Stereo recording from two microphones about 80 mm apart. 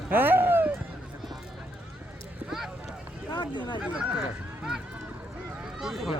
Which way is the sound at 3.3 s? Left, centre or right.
Left.